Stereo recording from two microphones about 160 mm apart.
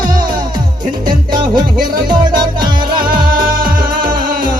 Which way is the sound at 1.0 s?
25° right (ahead or behind).